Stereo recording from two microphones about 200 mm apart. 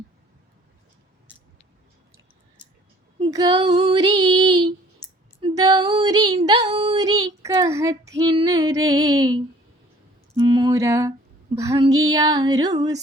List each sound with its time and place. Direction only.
3.2 s female singing: 20° right (ahead or behind)
10.3 s speech: 20° right (ahead or behind)